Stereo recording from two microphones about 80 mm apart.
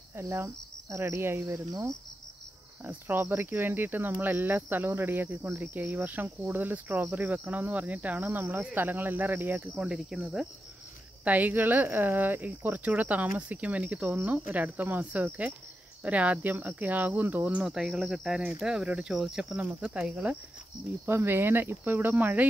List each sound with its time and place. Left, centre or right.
0.1 s cricket: right
2.8 s speech: right
9.8 s speech: centre
11.2 s speech: right
17.6 s speech: centre
21.0 s speech: right